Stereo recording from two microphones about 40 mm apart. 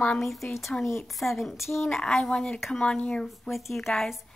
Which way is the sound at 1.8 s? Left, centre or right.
Centre.